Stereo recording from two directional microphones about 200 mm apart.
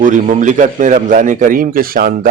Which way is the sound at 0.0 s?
40° right (ahead or behind).